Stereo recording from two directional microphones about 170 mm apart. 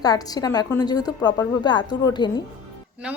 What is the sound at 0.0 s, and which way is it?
A woman's voice, 20° left (ahead or behind).